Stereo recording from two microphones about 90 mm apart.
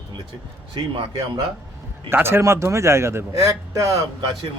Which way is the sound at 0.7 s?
65° right (ahead or behind).